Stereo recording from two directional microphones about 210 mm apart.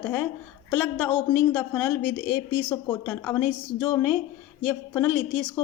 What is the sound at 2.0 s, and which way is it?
Speech, 45° left (ahead or behind).